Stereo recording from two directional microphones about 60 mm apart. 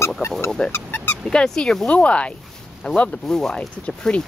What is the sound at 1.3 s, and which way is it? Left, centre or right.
Speech, centre.